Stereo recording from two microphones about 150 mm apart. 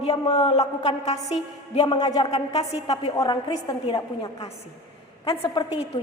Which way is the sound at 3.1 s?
25° left (ahead or behind).